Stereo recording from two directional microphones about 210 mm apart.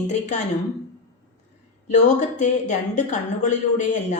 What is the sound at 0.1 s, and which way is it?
Speech, 35° left (ahead or behind).